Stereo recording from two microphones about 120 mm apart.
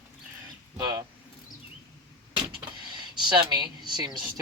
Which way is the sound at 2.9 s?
40° right (ahead or behind).